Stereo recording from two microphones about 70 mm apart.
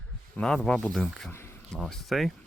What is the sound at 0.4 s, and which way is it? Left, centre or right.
Speech, centre.